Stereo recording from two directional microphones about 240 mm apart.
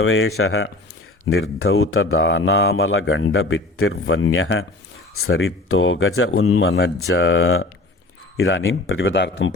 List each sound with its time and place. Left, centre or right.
0.0 s speech: left